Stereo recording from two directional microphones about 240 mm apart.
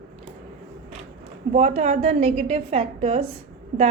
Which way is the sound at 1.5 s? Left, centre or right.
Right.